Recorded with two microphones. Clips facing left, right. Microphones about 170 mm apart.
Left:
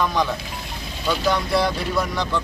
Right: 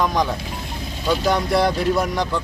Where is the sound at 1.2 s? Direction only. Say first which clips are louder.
Right 2 dB; 45° right (ahead or behind).